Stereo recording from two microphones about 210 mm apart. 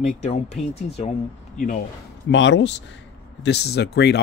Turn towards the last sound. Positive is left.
turn(degrees=50)  # may be behind; listen again after turning